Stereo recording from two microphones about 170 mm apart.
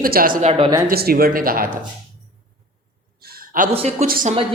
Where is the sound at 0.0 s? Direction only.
60° right (ahead or behind).